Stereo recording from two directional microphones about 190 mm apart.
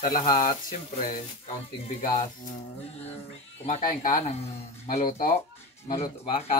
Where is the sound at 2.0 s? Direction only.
40° left (ahead or behind).